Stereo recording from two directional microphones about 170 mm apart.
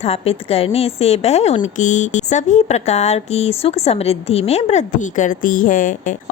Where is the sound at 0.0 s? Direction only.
35° left (ahead or behind).